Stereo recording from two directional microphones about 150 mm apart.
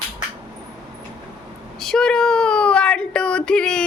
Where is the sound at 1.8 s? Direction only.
5° left (ahead or behind).